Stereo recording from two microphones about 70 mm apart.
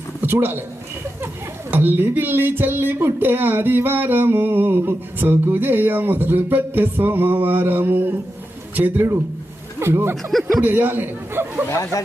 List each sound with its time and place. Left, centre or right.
0.2 s speech: right
1.7 s a man's voice: right
11.7 s speech: left